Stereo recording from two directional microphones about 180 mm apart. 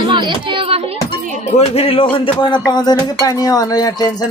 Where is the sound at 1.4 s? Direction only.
35° left (ahead or behind).